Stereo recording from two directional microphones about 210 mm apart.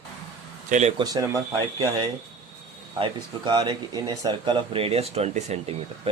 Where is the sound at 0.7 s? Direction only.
35° right (ahead or behind).